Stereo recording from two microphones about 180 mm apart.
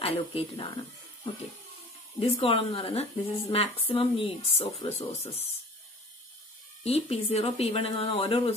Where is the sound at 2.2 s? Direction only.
30° left (ahead or behind).